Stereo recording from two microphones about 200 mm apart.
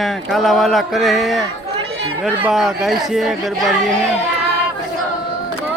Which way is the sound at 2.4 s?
Centre (ahead or behind).